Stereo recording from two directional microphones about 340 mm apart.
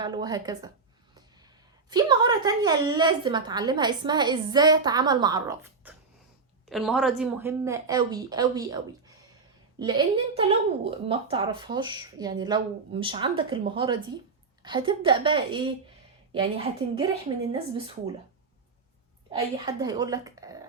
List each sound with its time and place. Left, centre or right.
0.0 s a woman's voice: centre
1.9 s a woman's voice: centre
17.5 s a woman's voice: centre
19.3 s a woman's voice: centre